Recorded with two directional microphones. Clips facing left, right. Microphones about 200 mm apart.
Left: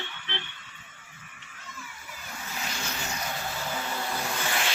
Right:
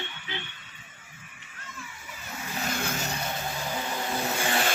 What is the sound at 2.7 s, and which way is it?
Vehicle, 50° right (ahead or behind).